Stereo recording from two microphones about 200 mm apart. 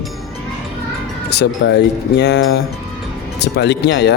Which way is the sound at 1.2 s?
55° left (ahead or behind).